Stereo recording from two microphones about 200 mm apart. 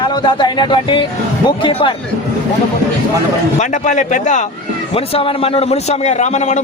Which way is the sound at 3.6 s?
40° left (ahead or behind).